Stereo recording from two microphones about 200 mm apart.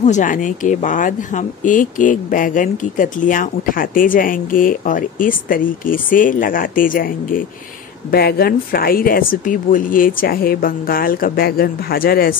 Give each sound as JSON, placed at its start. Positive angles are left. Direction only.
{"t": 0.0, "sound": "speech", "side_deg": 40}